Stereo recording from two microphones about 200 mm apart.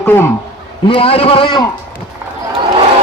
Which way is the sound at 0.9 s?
25° left (ahead or behind).